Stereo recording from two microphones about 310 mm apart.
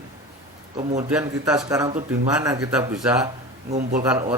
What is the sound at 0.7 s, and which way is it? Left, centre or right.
Speech, right.